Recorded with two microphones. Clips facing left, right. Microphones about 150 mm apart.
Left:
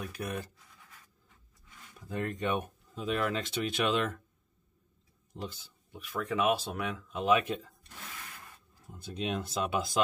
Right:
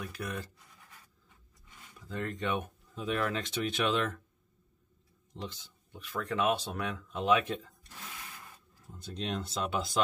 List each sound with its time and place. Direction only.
0.0 s speech: 20° left (ahead or behind)
2.0 s speech: 15° left (ahead or behind)
5.3 s speech: 10° left (ahead or behind)
8.9 s speech: 10° left (ahead or behind)